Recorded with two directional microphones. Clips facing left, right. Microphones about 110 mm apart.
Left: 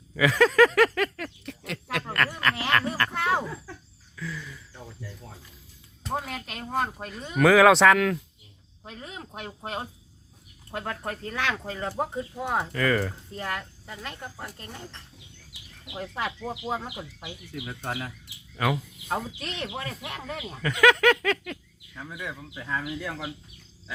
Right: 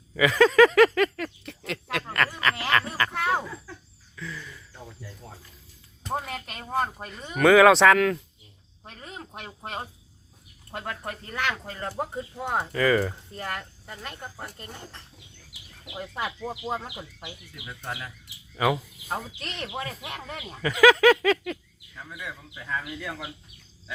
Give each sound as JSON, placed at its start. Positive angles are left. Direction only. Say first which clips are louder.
{"t": 0.2, "sound": "a sound", "louder": "right 2 dB", "side_deg": 0}
{"t": 2.3, "sound": "frog", "louder": "even", "side_deg": 0}
{"t": 4.1, "sound": "a sound", "louder": "left 2 dB", "side_deg": 0}
{"t": 6.1, "sound": "speech", "louder": "even", "side_deg": 0}
{"t": 8.9, "sound": "a sound", "louder": "left 1 dB", "side_deg": 5}
{"t": 10.7, "sound": "speech", "louder": "left 2 dB", "side_deg": 0}
{"t": 16.0, "sound": "speech", "louder": "even", "side_deg": -5}
{"t": 17.7, "sound": "speech", "louder": "left 2 dB", "side_deg": 35}
{"t": 18.5, "sound": "speech", "louder": "right 2 dB", "side_deg": -5}
{"t": 22.2, "sound": "speech", "louder": "left 2 dB", "side_deg": 20}